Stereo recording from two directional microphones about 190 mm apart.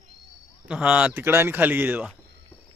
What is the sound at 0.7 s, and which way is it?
Speech, 5° right (ahead or behind).